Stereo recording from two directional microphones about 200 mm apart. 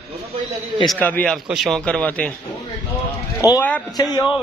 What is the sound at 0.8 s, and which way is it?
A man's voice, 10° left (ahead or behind).